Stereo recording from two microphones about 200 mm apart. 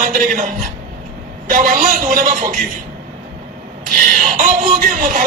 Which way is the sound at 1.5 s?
40° right (ahead or behind).